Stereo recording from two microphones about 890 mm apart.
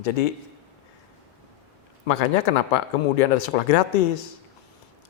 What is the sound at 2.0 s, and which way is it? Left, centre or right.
Speech, left.